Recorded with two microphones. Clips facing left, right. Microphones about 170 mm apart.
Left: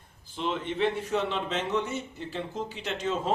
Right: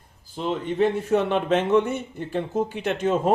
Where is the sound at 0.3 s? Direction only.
40° right (ahead or behind).